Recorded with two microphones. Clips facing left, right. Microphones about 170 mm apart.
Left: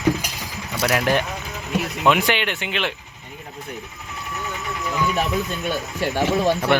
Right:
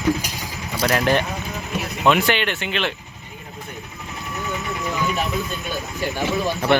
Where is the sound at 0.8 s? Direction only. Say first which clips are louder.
Right 1 dB; 5° left (ahead or behind).